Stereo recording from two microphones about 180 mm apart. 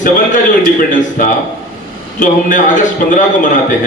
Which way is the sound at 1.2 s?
45° left (ahead or behind).